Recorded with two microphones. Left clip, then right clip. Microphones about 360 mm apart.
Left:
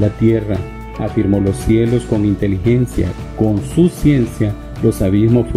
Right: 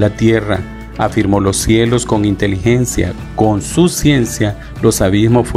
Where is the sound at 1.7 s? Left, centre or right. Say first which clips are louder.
Right 2 dB; centre.